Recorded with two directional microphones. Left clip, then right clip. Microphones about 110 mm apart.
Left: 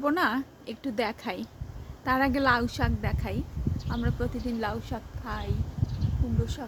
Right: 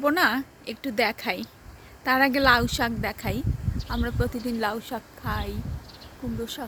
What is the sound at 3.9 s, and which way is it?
Speech, 85° right.